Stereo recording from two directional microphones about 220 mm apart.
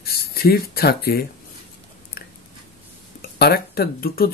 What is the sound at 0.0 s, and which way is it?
Speech, 45° left (ahead or behind).